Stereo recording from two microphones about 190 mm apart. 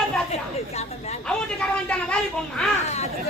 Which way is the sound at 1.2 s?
5° left (ahead or behind).